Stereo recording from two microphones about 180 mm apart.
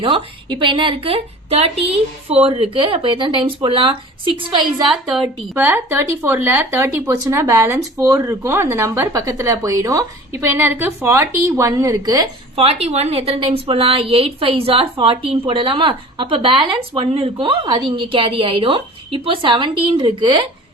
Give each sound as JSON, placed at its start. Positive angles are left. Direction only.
{"t": 0.0, "sound": "a woman's voice", "side_deg": -30}
{"t": 4.8, "sound": "speech", "side_deg": 0}
{"t": 12.6, "sound": "a woman's voice", "side_deg": -35}